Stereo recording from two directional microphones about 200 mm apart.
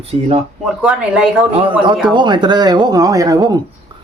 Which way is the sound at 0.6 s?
Centre (ahead or behind).